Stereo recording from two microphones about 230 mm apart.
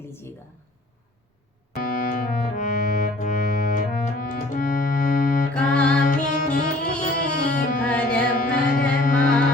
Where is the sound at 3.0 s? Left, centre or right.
Left.